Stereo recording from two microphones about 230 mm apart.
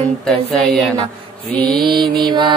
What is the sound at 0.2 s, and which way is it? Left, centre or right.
Speech, centre.